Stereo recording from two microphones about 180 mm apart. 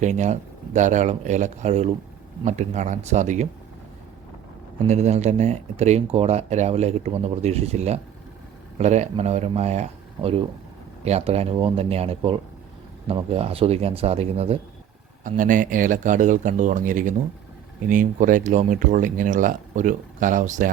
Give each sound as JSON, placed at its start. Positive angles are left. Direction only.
{"t": 0.0, "sound": "speech", "side_deg": -40}
{"t": 4.9, "sound": "speech", "side_deg": -40}
{"t": 15.2, "sound": "speech", "side_deg": -45}